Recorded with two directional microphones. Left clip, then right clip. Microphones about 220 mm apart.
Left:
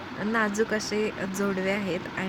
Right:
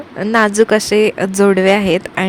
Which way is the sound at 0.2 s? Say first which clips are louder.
Right 14 dB; 40° right (ahead or behind).